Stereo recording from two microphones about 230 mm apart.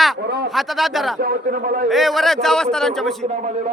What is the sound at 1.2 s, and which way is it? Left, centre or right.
Speech, right.